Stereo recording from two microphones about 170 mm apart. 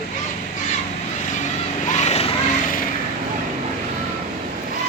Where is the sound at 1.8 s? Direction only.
45° left (ahead or behind).